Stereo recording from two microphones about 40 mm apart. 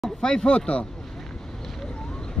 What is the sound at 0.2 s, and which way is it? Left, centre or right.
Speech, centre.